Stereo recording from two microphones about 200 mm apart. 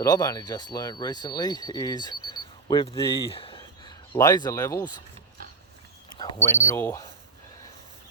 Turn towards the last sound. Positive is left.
turn(degrees=15)  # may be behind; listen again after turning